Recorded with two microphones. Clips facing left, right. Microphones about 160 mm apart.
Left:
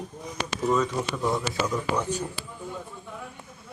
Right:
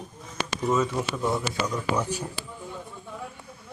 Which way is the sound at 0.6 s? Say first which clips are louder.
Even; 5° right (ahead or behind).